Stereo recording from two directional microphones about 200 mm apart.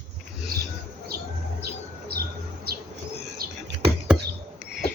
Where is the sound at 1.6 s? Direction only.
50° right (ahead or behind).